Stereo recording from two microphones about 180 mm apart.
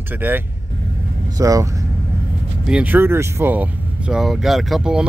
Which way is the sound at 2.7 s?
10° right (ahead or behind).